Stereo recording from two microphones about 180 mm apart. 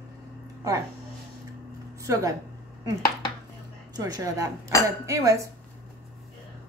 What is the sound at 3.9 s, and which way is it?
Speech, 20° right (ahead or behind).